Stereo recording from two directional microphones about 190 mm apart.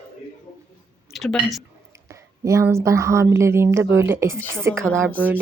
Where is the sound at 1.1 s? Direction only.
Centre (ahead or behind).